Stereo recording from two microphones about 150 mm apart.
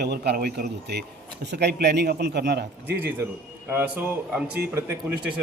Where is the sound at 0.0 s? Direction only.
90° right.